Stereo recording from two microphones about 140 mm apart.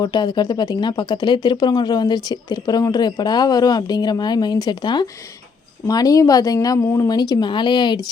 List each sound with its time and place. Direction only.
0.0 s a woman's voice: 30° left (ahead or behind)